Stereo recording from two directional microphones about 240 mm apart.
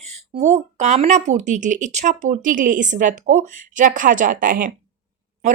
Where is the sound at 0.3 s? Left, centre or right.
Right.